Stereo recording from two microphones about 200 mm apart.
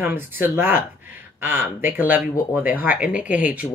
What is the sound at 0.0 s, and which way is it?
Speech, 10° right (ahead or behind).